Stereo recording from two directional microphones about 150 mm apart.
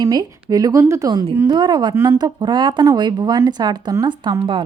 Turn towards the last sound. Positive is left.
turn(degrees=-30)  # may be behind; listen again after turning